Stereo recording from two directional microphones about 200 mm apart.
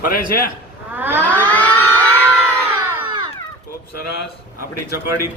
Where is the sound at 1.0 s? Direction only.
10° right (ahead or behind).